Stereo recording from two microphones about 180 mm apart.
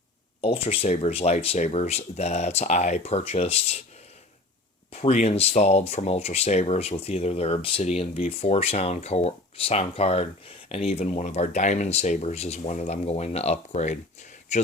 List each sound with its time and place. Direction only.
0.4 s speech: 30° left (ahead or behind)
4.9 s speech: 35° left (ahead or behind)